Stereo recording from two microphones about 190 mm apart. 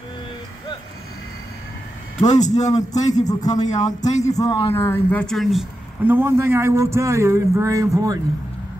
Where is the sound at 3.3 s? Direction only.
20° left (ahead or behind).